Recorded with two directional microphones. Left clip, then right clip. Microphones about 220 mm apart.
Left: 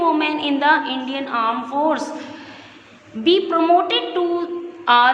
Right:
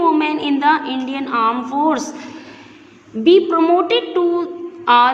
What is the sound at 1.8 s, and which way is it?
Speech, 15° right (ahead or behind).